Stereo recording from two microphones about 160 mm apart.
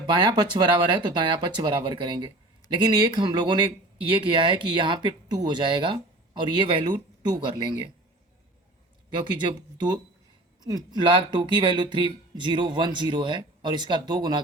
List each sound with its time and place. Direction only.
0.0 s speech: 30° right (ahead or behind)
9.1 s speech: 30° right (ahead or behind)